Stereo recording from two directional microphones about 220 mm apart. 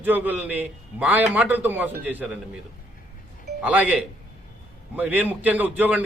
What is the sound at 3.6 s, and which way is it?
A man's voice, 5° right (ahead or behind).